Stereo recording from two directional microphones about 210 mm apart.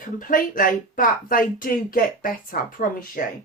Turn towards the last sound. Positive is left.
turn(degrees=40)  # may be behind; listen again after turning